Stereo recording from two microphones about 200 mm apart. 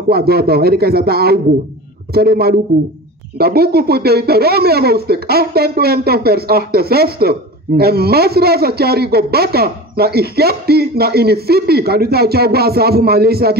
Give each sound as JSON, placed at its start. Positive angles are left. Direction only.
{"t": 0.1, "sound": "speech", "side_deg": -50}